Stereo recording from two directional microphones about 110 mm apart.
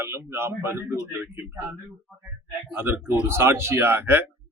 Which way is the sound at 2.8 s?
20° right (ahead or behind).